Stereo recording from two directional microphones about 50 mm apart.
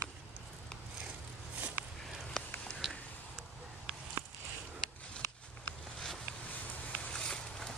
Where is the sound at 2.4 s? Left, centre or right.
Centre.